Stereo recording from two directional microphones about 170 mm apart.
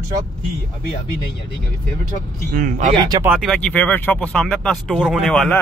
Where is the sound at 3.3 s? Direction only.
Centre (ahead or behind).